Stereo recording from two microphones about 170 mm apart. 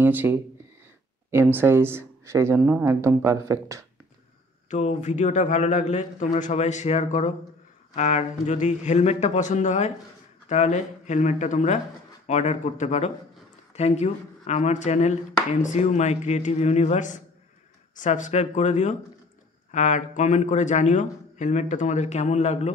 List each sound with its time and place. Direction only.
0.0 s speech: 10° right (ahead or behind)
4.6 s a man's voice: 40° left (ahead or behind)